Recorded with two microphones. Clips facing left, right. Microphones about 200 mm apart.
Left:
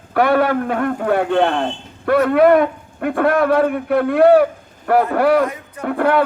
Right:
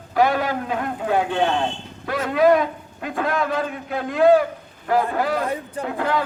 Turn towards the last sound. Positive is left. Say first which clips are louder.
# left 7 dB
turn(degrees=60)  # may be behind; listen again after turning